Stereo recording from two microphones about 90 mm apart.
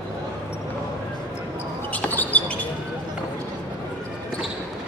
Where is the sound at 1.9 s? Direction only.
20° left (ahead or behind).